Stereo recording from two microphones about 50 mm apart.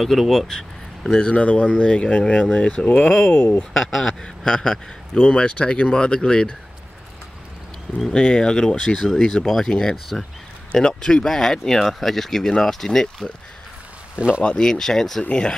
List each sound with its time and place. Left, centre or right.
0.0 s speech: centre; by 3.1 s left
3.3 s speech: left
3.7 s speech: centre
8.2 s speech: centre
14.4 s speech: centre
15.2 s speech: centre